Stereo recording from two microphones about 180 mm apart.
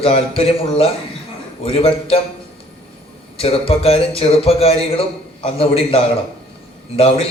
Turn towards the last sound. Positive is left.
turn(degrees=30)  # may be behind; listen again after turning